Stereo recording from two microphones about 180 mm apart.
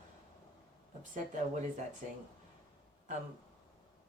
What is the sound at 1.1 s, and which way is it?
Speech, 40° right (ahead or behind).